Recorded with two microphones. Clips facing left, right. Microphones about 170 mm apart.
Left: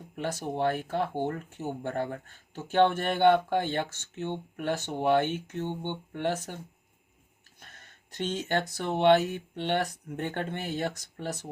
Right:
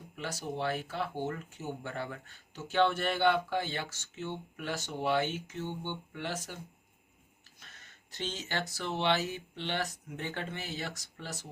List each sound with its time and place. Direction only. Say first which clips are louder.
0.2 s speech: left 6 dB; 50° left (ahead or behind)
7.6 s speech: left 4 dB; 55° left (ahead or behind)